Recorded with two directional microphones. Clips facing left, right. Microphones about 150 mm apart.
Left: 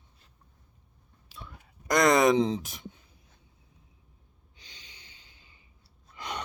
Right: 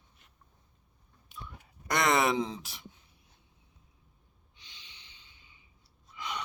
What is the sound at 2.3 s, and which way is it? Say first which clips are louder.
Speech: left 7 dB; 20° left (ahead or behind).